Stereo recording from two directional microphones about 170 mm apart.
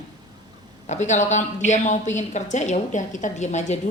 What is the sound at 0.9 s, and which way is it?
A woman's voice, 45° left (ahead or behind).